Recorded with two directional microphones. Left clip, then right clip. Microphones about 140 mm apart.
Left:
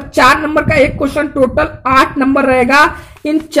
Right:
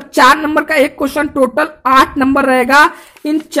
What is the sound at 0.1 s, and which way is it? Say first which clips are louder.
A woman's voice: even; 50° right (ahead or behind).